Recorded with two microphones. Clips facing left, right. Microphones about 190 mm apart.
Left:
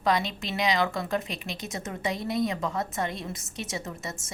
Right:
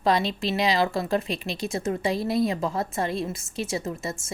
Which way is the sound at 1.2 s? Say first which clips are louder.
Right 6 dB; 15° left (ahead or behind).